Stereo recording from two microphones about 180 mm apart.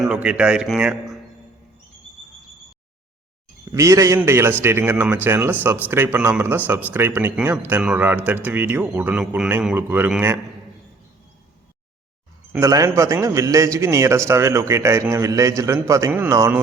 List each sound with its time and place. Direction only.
0.0 s a man's voice: 5° right (ahead or behind)
3.7 s a man's voice: 15° right (ahead or behind)
12.5 s a man's voice: 20° right (ahead or behind)